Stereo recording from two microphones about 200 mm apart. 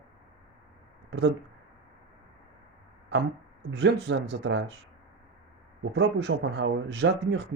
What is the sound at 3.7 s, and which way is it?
Speech, 60° right (ahead or behind).